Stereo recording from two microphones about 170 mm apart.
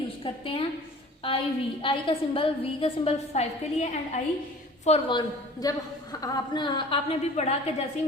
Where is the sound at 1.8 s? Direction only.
30° left (ahead or behind).